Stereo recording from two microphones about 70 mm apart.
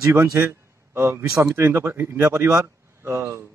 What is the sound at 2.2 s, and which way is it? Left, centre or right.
A man's voice, right.